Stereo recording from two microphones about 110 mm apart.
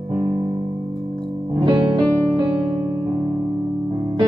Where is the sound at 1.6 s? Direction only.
45° right (ahead or behind).